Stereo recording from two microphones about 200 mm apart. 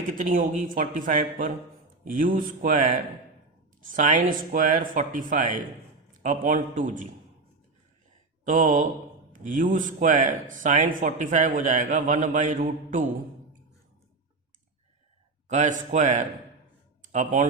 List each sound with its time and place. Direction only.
0.1 s a man's voice: 40° right (ahead or behind)
8.4 s a man's voice: 40° right (ahead or behind)
15.4 s a man's voice: 40° right (ahead or behind)